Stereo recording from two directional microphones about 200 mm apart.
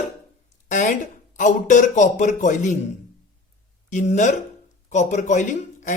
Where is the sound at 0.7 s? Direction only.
40° left (ahead or behind).